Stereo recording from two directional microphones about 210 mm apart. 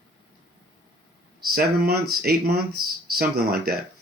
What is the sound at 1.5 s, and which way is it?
Speech, 45° right (ahead or behind).